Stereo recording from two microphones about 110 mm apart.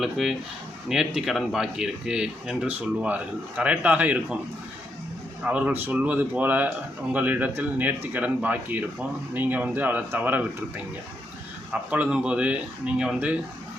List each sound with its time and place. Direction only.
0.0 s speech: 5° right (ahead or behind)
5.5 s speech: 15° right (ahead or behind)
11.7 s speech: 15° right (ahead or behind)